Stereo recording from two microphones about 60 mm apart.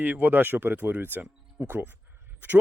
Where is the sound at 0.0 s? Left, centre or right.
Right.